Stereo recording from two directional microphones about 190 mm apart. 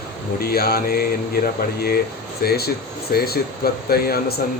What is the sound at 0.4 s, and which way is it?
Speech, 55° left (ahead or behind).